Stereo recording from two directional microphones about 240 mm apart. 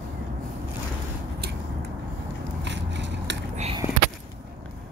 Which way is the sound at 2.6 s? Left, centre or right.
Right.